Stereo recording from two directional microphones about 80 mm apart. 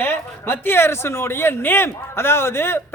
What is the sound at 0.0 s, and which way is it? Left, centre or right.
Speech, left.